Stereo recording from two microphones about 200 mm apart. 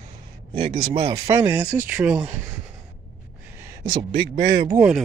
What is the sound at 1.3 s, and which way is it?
Speech, 10° right (ahead or behind).